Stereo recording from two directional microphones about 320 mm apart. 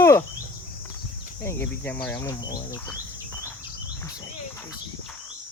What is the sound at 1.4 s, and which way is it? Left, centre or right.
Speech, centre.